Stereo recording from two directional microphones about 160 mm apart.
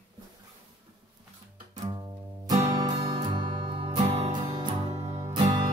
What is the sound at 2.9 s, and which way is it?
Music, 35° right (ahead or behind).